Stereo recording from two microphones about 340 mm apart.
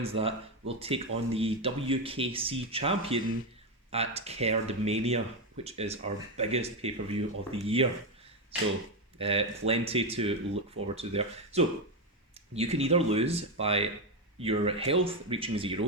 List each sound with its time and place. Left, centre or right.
0.0 s speech: centre
9.1 s speech: centre